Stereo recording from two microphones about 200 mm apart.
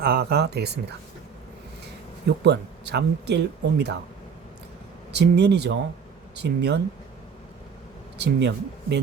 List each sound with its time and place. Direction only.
0.0 s speech: 55° right (ahead or behind)
2.4 s speech: 55° right (ahead or behind)
5.1 s speech: 55° right (ahead or behind)
8.2 s speech: 60° right (ahead or behind)